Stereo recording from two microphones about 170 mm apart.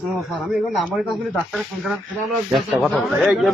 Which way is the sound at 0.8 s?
Centre (ahead or behind).